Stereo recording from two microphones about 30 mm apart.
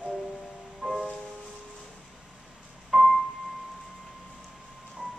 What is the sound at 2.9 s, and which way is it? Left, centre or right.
Keyboard, centre.